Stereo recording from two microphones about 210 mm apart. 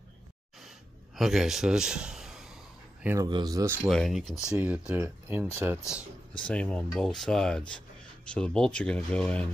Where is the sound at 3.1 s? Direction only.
15° right (ahead or behind).